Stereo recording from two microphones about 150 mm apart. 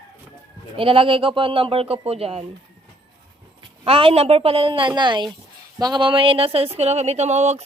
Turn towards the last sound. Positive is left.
turn(degrees=-50)  # may be behind; listen again after turning